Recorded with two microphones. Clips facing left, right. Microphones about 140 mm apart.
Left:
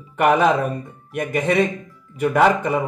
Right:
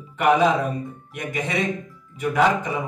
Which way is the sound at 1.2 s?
55° left (ahead or behind).